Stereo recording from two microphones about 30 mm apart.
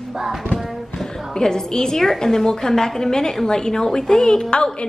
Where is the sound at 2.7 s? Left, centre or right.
Centre.